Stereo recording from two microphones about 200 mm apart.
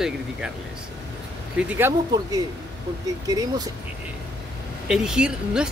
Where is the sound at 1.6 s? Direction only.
10° right (ahead or behind).